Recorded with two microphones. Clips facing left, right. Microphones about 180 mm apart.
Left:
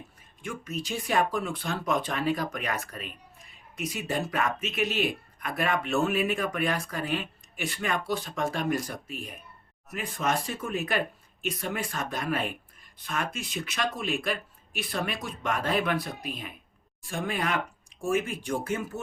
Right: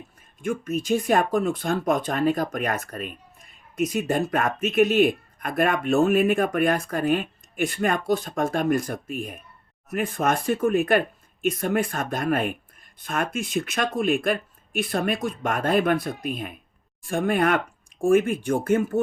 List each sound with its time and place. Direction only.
0.4 s speech: 50° right (ahead or behind)